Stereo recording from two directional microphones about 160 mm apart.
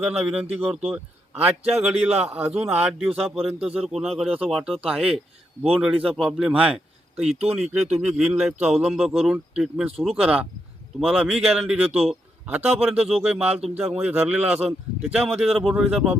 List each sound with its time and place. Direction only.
0.0 s a man's voice: 5° right (ahead or behind)
7.2 s speech: 40° right (ahead or behind)
7.5 s a man's voice: centre (ahead or behind)
8.0 s a man's voice: 10° right (ahead or behind)